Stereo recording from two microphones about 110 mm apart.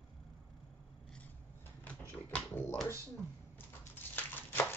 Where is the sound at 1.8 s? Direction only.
10° left (ahead or behind).